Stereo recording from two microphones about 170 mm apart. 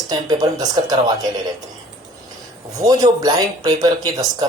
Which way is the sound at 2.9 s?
20° right (ahead or behind).